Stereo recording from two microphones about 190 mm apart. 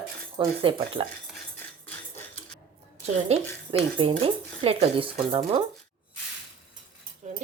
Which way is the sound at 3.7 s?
25° right (ahead or behind).